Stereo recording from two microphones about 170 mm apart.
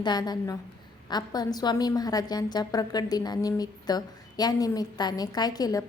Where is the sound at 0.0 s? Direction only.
25° left (ahead or behind).